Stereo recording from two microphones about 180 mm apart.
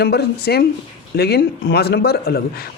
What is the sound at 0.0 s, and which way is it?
A man's voice, 65° left (ahead or behind).